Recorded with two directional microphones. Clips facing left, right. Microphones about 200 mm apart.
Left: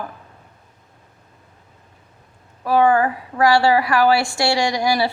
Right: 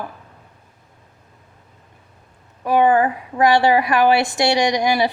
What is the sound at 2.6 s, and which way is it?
A woman's voice, 20° right (ahead or behind).